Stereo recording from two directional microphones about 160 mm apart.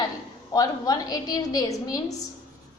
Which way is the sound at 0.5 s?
20° left (ahead or behind).